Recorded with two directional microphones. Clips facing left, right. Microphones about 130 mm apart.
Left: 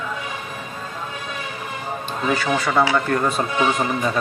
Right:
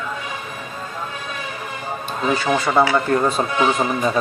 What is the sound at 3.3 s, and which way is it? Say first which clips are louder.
Speech: right 1 dB; 25° right (ahead or behind).